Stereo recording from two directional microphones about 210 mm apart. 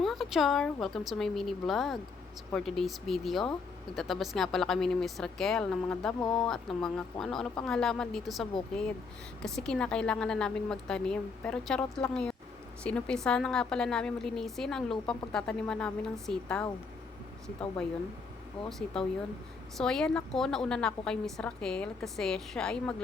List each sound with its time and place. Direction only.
0.0 s speech: centre (ahead or behind)
18.6 s speech: 25° left (ahead or behind)
19.7 s speech: 5° left (ahead or behind)